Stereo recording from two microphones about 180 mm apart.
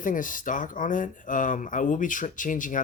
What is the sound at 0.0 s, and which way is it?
Speech, 45° left (ahead or behind).